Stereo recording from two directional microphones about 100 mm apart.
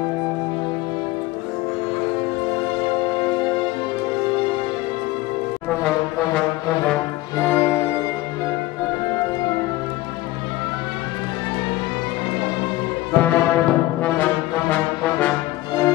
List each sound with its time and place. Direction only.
5.7 s brass instrument: 10° left (ahead or behind)
7.3 s music: 30° left (ahead or behind)
13.1 s brass instrument: 10° left (ahead or behind)